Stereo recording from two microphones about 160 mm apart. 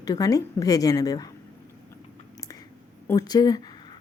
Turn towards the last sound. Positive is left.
turn(degrees=25)  # may be behind; listen again after turning